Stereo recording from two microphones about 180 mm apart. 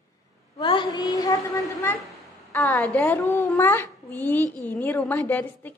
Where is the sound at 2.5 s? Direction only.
10° left (ahead or behind).